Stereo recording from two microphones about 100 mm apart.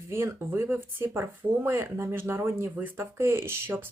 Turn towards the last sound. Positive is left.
turn(degrees=-25)  # may be behind; listen again after turning